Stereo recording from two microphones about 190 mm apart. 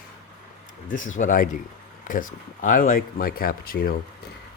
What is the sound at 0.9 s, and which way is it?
Speech, 40° left (ahead or behind).